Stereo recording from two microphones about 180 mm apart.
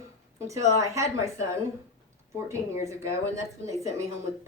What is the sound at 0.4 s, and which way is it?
A woman's voice, 15° right (ahead or behind).